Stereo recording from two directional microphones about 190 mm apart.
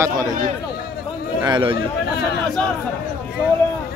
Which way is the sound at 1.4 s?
25° right (ahead or behind).